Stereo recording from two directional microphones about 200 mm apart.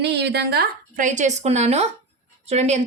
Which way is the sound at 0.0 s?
55° right (ahead or behind).